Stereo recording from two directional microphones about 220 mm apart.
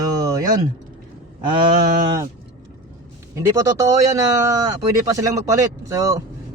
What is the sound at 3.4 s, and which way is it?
Speech, 15° right (ahead or behind).